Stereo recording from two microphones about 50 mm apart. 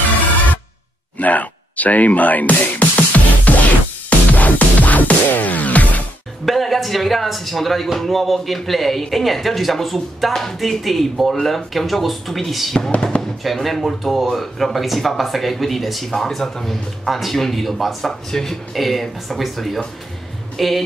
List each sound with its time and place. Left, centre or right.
1.1 s music: left
6.4 s speech: centre